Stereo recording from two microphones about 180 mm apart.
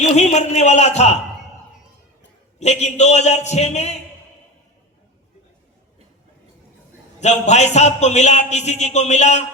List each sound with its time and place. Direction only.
0.0 s a man's voice: 40° left (ahead or behind)
2.6 s a man's voice: 40° left (ahead or behind)
7.2 s a man's voice: 40° left (ahead or behind)